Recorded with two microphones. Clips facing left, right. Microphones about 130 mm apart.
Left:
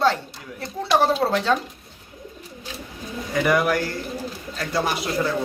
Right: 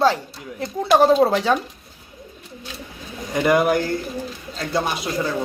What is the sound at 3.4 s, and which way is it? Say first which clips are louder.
Speech: right 3 dB; 25° right (ahead or behind).